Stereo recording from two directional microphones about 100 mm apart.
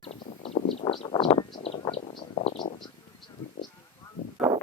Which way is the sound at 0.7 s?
75° left (ahead or behind).